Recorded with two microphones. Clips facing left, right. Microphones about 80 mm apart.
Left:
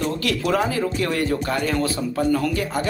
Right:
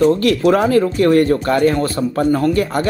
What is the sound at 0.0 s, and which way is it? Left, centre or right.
Speech, right.